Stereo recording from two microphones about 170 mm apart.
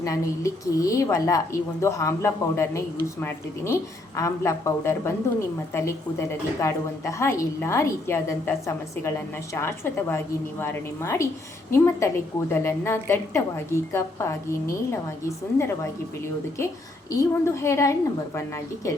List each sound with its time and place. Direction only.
0.0 s a woman's voice: 20° left (ahead or behind)
15.5 s a woman's voice: 15° left (ahead or behind)
17.1 s a woman's voice: 15° left (ahead or behind)